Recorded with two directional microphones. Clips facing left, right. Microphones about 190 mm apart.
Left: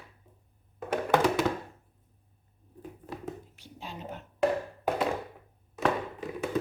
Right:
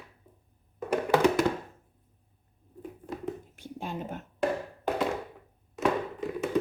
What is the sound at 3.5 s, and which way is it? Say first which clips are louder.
Whispering: right 7 dB; 50° right (ahead or behind).